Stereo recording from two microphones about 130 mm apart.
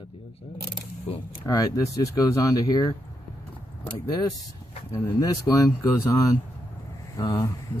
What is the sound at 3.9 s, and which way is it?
Speech, 30° left (ahead or behind).